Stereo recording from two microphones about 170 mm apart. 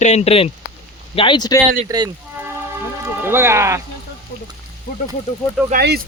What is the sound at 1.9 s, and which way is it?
Speech, 20° right (ahead or behind).